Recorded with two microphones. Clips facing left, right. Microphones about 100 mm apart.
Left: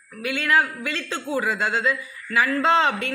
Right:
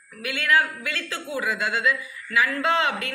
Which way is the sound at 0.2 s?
25° left (ahead or behind).